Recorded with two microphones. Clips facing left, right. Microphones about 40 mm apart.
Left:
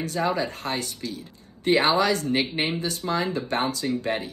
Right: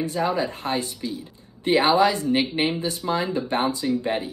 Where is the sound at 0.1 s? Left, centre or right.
Right.